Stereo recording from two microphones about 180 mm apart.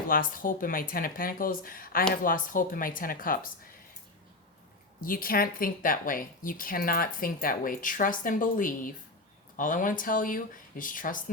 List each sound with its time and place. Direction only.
0.1 s speech: 50° left (ahead or behind)
4.9 s speech: 50° left (ahead or behind)